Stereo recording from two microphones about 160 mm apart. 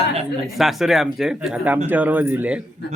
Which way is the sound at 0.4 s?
Centre (ahead or behind).